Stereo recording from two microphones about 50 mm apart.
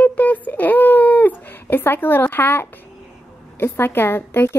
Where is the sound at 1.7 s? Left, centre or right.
Left.